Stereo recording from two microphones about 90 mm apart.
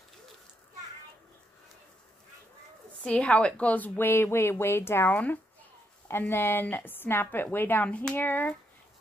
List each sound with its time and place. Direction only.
3.0 s speech: 10° left (ahead or behind)